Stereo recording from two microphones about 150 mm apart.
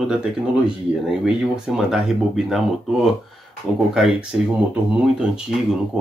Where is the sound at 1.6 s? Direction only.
5° right (ahead or behind).